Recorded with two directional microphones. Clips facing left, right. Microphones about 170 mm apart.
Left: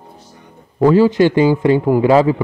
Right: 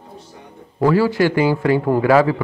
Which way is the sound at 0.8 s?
20° left (ahead or behind).